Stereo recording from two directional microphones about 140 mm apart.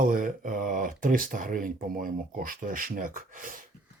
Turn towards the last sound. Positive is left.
turn(degrees=-80)